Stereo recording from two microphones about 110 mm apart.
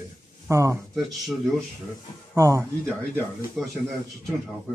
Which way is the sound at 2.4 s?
30° right (ahead or behind).